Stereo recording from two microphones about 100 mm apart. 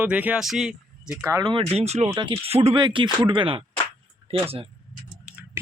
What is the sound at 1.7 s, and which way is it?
Speech, 90° right.